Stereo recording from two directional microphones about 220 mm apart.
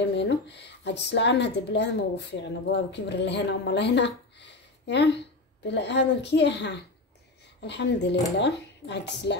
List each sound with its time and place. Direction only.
0.0 s a woman's voice: 50° left (ahead or behind)